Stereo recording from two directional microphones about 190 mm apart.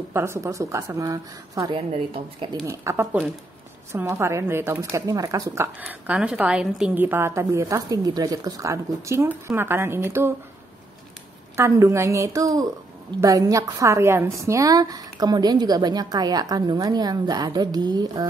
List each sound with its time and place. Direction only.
0.1 s a woman's voice: 15° right (ahead or behind)
1.8 s a woman's voice: 30° right (ahead or behind)
2.6 s a woman's voice: 15° right (ahead or behind)
11.5 s a woman's voice: 15° right (ahead or behind)